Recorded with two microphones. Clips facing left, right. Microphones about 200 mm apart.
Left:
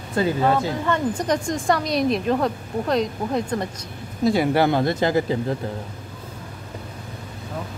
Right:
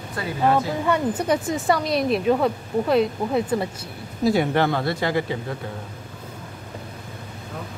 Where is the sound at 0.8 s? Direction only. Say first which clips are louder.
Right 1 dB; 5° right (ahead or behind).